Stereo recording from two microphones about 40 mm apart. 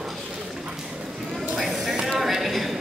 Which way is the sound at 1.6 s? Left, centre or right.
Centre.